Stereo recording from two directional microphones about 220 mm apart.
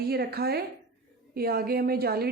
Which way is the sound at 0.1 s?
45° right (ahead or behind).